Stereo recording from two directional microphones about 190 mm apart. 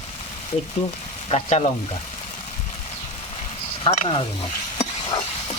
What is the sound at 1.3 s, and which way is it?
Speech, 35° left (ahead or behind).